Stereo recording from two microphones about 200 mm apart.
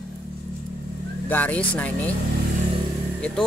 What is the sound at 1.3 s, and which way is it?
Speech, 5° left (ahead or behind).